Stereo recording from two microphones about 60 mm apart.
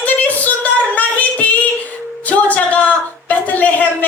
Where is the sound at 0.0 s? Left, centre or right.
Left.